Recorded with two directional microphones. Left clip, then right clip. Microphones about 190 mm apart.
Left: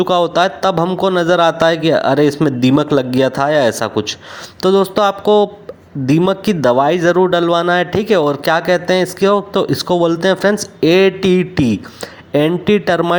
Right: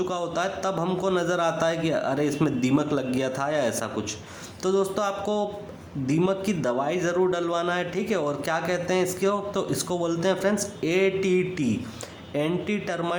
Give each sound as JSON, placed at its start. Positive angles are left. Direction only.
{"t": 0.0, "sound": "a man's voice", "side_deg": 40}